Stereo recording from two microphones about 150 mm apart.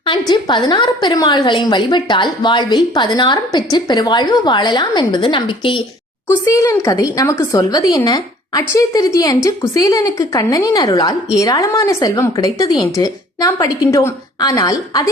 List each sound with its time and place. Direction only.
0.0 s a woman's voice: 30° left (ahead or behind)
6.4 s a woman's voice: 20° left (ahead or behind)